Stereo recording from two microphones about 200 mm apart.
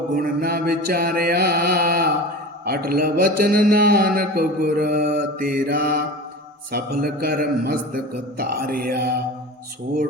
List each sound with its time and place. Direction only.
0.1 s a man's voice: 50° right (ahead or behind)